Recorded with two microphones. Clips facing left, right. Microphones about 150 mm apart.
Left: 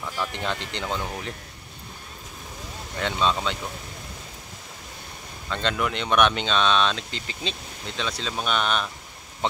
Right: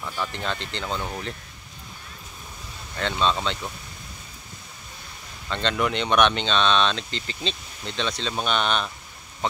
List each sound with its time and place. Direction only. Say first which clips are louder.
0.3 s speech: even; 15° left (ahead or behind)
3.0 s speech: even; 10° left (ahead or behind)
5.5 s speech: right 2 dB; 5° left (ahead or behind)